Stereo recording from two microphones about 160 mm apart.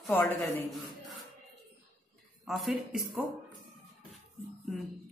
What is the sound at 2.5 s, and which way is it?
Speech, centre (ahead or behind).